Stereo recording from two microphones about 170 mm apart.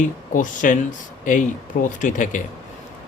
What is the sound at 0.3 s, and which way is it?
A man's voice, 50° left (ahead or behind).